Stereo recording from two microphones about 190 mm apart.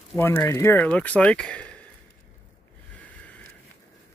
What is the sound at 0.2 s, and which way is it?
Speech, 10° left (ahead or behind).